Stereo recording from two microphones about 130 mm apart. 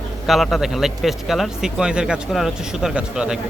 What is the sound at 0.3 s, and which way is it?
A man's voice, centre (ahead or behind).